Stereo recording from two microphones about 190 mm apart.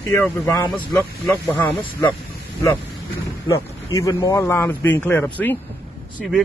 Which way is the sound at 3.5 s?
15° left (ahead or behind).